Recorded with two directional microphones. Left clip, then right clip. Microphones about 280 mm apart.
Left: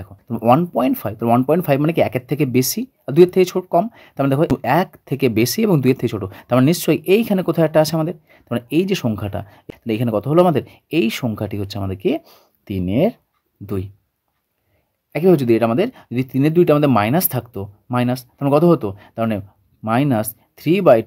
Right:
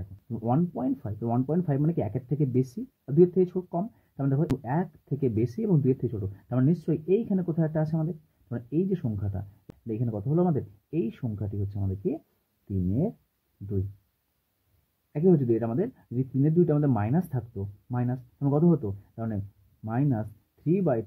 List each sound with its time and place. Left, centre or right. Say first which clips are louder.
0.3 s speech: left 14 dB; left
15.1 s speech: left 10 dB; left